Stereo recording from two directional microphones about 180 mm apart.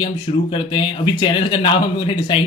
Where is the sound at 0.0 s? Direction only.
30° left (ahead or behind).